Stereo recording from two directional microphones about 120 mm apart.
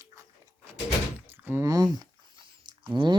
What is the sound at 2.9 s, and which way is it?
Speech, 40° right (ahead or behind).